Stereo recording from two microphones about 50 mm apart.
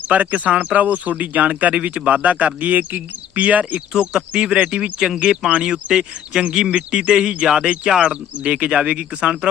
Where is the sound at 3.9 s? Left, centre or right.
Centre.